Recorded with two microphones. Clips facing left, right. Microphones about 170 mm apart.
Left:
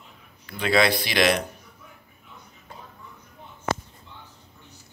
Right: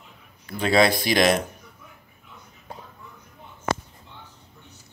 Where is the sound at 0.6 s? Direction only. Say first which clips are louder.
Right 2 dB; 45° right (ahead or behind).